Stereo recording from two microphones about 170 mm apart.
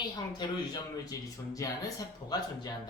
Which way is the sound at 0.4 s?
25° left (ahead or behind).